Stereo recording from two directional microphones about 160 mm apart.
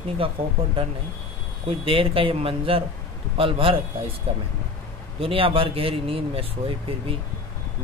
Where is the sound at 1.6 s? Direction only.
35° right (ahead or behind).